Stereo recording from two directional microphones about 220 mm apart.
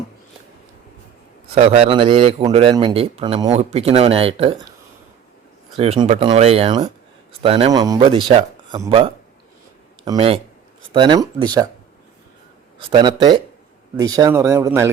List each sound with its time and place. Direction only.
1.5 s a man's voice: 25° right (ahead or behind)
5.7 s a man's voice: 25° right (ahead or behind)
10.0 s a man's voice: 25° right (ahead or behind)
12.9 s a man's voice: 20° right (ahead or behind)